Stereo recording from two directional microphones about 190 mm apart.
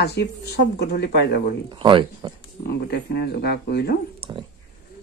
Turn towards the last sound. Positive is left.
turn(degrees=-25)  # may be behind; listen again after turning